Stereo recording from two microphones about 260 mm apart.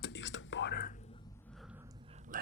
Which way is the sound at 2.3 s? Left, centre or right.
Right.